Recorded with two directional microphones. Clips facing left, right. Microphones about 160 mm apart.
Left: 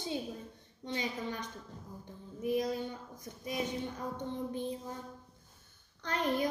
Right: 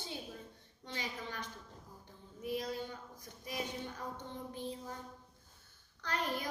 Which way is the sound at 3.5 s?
20° left (ahead or behind).